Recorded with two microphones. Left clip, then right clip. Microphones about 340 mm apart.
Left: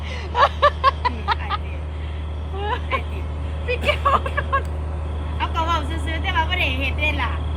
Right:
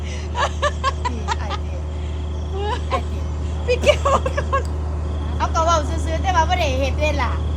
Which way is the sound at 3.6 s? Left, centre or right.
Centre.